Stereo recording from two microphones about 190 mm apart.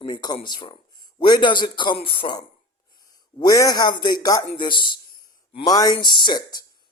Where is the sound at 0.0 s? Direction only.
20° left (ahead or behind).